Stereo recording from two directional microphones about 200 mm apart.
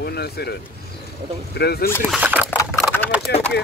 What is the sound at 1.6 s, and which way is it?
Speech, 50° left (ahead or behind).